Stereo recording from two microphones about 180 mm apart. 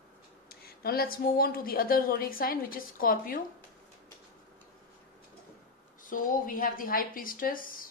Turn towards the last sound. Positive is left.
turn(degrees=50)  # may be behind; listen again after turning